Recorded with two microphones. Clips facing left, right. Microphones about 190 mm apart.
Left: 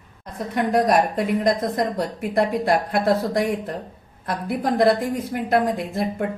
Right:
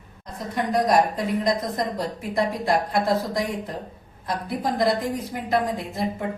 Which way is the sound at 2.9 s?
60° left (ahead or behind).